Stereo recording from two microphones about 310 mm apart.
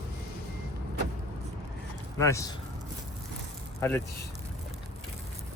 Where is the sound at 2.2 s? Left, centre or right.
Centre.